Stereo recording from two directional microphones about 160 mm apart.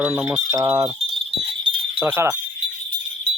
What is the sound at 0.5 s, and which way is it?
Wind chime, 20° right (ahead or behind).